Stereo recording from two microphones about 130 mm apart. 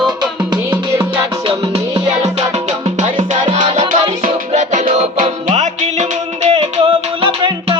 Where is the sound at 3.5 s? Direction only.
40° right (ahead or behind).